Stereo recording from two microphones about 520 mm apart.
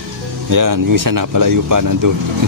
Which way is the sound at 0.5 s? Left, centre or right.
Right.